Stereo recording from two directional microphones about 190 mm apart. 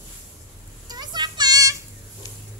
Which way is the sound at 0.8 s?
20° right (ahead or behind).